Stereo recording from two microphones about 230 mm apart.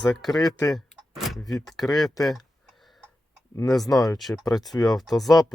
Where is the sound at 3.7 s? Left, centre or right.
Centre.